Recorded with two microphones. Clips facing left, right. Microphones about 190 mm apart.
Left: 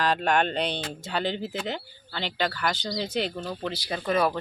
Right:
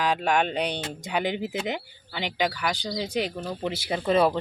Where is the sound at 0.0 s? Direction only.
10° right (ahead or behind).